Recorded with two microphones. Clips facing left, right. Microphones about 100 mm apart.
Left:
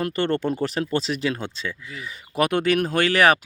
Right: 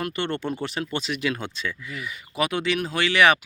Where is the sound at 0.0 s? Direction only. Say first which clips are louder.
Left 5 dB; 40° left (ahead or behind).